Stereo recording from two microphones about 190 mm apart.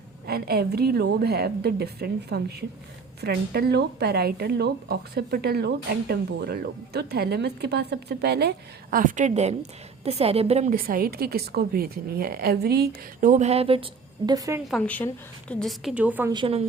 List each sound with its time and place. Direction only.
0.3 s a woman's voice: 55° right (ahead or behind); by 10.8 s 35° right (ahead or behind)
10.8 s a woman's voice: 50° right (ahead or behind); by 13.8 s 30° right (ahead or behind)
14.3 s a woman's voice: 20° right (ahead or behind)
14.7 s a woman's voice: 10° left (ahead or behind); by 16.3 s 10° right (ahead or behind)
16.3 s a woman's voice: 30° right (ahead or behind)